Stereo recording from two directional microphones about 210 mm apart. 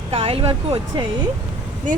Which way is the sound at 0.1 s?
30° right (ahead or behind).